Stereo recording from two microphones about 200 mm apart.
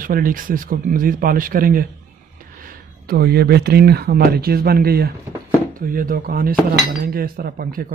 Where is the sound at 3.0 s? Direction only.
50° right (ahead or behind).